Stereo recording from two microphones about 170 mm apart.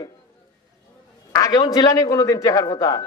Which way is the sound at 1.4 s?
20° left (ahead or behind).